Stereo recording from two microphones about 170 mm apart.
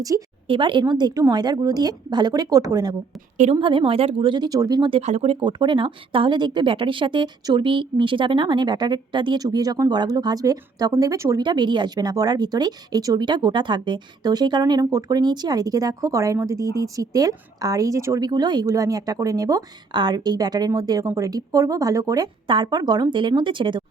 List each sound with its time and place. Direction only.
0.0 s speech: 25° right (ahead or behind)
3.3 s a woman's voice: 45° right (ahead or behind)
3.6 s speech: 30° right (ahead or behind)